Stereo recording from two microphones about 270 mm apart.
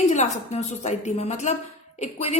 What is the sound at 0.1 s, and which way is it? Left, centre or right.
A woman's voice, left.